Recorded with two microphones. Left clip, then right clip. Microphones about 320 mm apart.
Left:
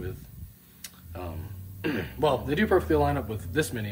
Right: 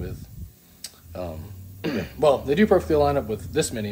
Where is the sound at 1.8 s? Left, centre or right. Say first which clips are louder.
Right 4 dB; centre.